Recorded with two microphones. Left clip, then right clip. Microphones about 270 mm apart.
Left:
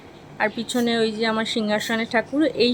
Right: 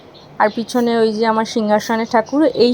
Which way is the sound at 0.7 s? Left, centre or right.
Centre.